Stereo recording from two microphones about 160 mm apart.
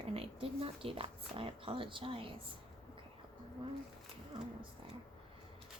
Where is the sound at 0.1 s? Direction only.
35° right (ahead or behind).